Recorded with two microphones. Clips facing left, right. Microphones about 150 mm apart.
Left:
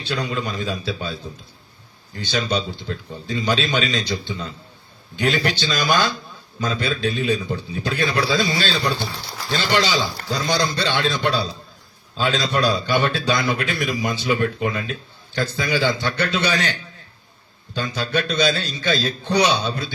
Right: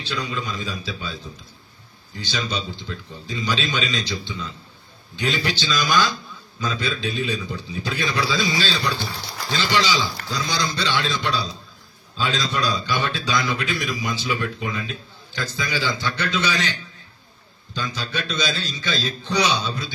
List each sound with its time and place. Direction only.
0.0 s a man's voice: 60° left (ahead or behind)
17.9 s a man's voice: 60° left (ahead or behind)